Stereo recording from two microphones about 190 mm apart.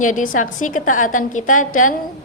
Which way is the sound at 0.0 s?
45° left (ahead or behind).